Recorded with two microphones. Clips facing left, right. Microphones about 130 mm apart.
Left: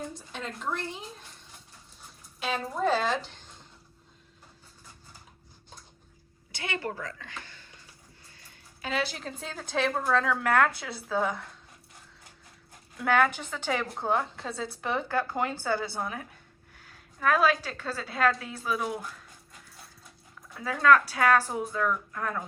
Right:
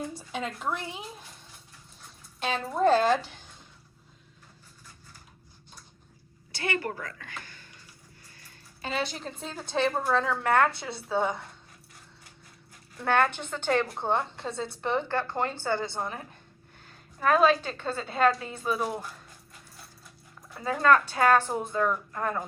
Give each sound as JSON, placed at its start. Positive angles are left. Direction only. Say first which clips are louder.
{"t": 0.1, "sound": "a woman's voice", "louder": "right 4 dB", "side_deg": -5}
{"t": 2.4, "sound": "a woman's voice", "louder": "right 4 dB", "side_deg": 0}
{"t": 6.5, "sound": "speech", "louder": "right 3 dB", "side_deg": 20}
{"t": 7.2, "sound": "a sound", "louder": "even", "side_deg": 25}
{"t": 8.8, "sound": "a woman's voice", "louder": "even", "side_deg": 0}
{"t": 13.0, "sound": "a woman's voice", "louder": "even", "side_deg": 5}
{"t": 20.6, "sound": "a woman's voice", "louder": "even", "side_deg": 0}